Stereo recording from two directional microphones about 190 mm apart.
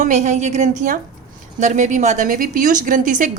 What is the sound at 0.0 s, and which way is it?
Speech, 40° right (ahead or behind).